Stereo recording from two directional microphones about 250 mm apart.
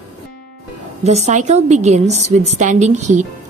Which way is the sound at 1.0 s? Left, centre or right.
Right.